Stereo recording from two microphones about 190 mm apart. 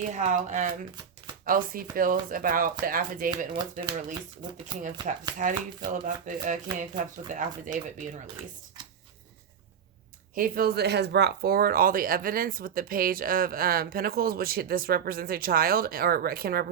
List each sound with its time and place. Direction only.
0.1 s speech: 40° right (ahead or behind)
5.1 s speech: 40° right (ahead or behind)
10.3 s speech: 50° right (ahead or behind)